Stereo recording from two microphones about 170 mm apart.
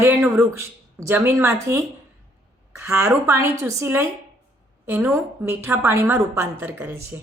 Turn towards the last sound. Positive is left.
turn(degrees=-15)  # may be behind; listen again after turning